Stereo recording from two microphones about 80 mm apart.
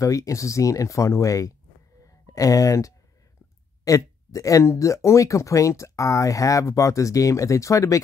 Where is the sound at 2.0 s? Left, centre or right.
Left.